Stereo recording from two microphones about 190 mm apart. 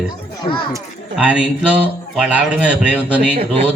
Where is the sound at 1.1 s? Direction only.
5° right (ahead or behind).